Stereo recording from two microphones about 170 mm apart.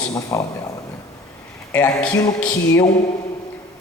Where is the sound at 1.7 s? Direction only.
10° left (ahead or behind).